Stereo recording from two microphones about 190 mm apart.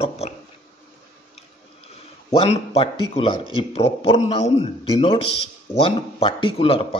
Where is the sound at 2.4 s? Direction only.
30° left (ahead or behind).